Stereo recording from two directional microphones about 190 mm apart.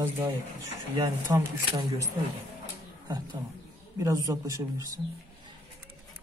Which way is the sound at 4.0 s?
15° right (ahead or behind).